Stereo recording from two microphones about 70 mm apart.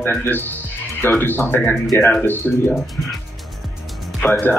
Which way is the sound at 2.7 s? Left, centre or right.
Centre.